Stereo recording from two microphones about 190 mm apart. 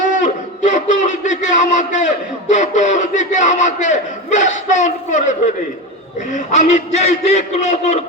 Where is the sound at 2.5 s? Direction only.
40° left (ahead or behind).